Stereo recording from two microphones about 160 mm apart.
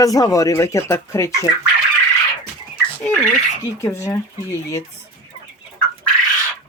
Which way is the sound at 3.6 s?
20° left (ahead or behind).